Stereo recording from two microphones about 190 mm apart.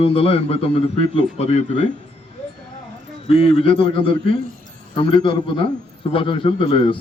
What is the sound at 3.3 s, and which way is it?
Speech, 30° left (ahead or behind).